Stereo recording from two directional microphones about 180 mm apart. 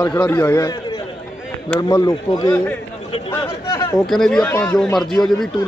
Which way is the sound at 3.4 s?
25° left (ahead or behind).